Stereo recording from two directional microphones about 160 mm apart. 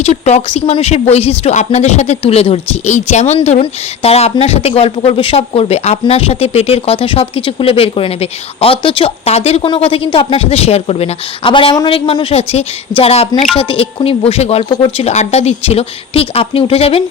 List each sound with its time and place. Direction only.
0.0 s speech: 40° left (ahead or behind)